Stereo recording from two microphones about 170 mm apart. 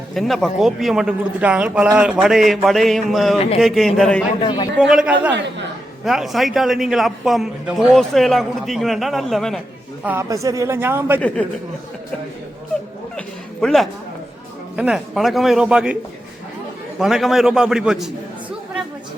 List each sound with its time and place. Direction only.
0.1 s a man's voice: centre (ahead or behind)
4.4 s a man's voice: 30° left (ahead or behind)
4.8 s a man's voice: centre (ahead or behind)
5.3 s a woman's voice: 90° right
6.1 s a man's voice: centre (ahead or behind)
10.0 s a man's voice: 15° right (ahead or behind)
11.4 s speech: 10° left (ahead or behind)
13.1 s bow-wow: 5° left (ahead or behind)
14.8 s a man's voice: 5° right (ahead or behind)
17.0 s a man's voice: centre (ahead or behind)